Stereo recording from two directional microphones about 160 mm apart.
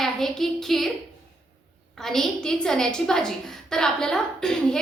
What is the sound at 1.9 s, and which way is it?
A woman's voice, centre (ahead or behind).